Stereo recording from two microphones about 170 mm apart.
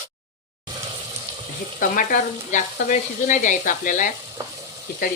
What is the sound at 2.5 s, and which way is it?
Speech, 45° left (ahead or behind).